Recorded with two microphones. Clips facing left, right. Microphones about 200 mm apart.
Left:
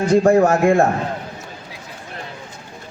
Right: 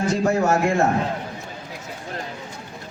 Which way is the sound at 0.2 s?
50° left (ahead or behind).